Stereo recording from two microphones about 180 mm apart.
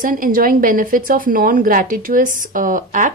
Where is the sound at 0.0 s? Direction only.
50° right (ahead or behind).